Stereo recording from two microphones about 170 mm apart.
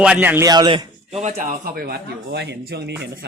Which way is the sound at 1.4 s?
55° right (ahead or behind).